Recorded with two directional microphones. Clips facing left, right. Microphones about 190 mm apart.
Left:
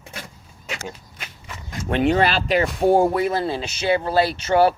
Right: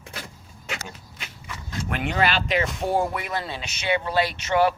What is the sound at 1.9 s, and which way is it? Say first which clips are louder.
Speech: left 6 dB; 35° left (ahead or behind).